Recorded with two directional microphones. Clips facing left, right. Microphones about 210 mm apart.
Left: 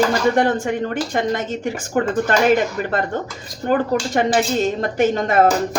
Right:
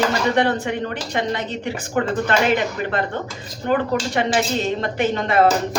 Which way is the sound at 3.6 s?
40° left (ahead or behind).